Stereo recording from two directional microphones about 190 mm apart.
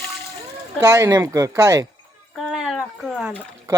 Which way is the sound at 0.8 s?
15° right (ahead or behind).